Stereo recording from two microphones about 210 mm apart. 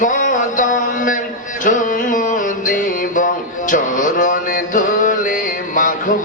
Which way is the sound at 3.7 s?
40° left (ahead or behind).